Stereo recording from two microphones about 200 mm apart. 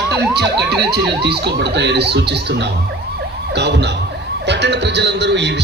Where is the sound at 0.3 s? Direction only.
55° right (ahead or behind).